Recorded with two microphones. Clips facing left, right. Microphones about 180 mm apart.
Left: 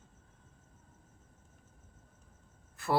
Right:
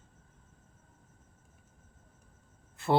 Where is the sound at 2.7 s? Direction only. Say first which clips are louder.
Right 4 dB; 25° right (ahead or behind).